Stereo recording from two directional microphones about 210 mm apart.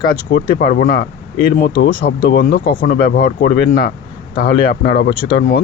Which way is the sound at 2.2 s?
45° left (ahead or behind).